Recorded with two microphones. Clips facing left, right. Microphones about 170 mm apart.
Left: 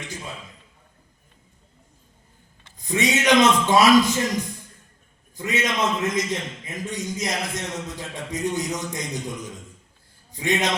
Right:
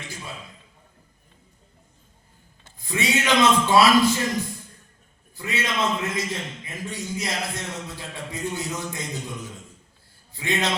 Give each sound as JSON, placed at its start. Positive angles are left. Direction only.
{"t": 2.7, "sound": "speech", "side_deg": 20}
{"t": 5.4, "sound": "a man's voice", "side_deg": 20}